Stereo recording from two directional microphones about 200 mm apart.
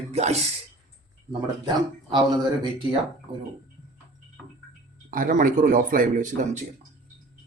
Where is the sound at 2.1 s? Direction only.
25° right (ahead or behind).